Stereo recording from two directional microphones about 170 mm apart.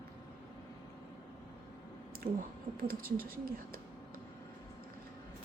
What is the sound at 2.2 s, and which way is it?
Speech, 50° right (ahead or behind).